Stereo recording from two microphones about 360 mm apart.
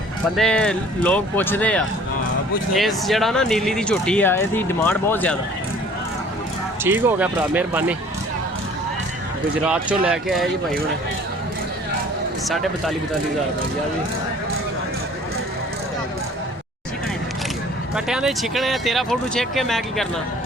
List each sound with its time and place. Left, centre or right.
0.3 s speech: centre
6.8 s speech: centre
9.6 s speech: centre
17.9 s speech: centre